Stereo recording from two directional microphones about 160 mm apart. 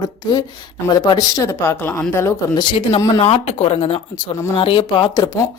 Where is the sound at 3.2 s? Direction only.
40° left (ahead or behind).